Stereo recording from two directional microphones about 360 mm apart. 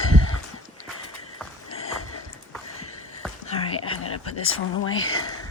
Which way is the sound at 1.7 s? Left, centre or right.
Left.